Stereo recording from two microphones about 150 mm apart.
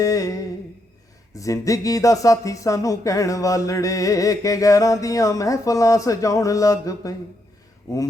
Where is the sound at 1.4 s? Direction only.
20° left (ahead or behind).